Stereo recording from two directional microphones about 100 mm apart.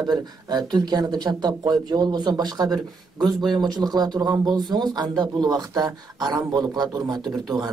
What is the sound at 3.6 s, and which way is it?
Speech, 45° right (ahead or behind).